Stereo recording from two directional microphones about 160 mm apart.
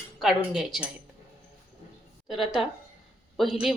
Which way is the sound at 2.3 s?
Centre (ahead or behind).